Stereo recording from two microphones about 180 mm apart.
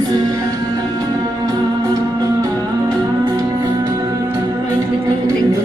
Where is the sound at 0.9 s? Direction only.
20° right (ahead or behind).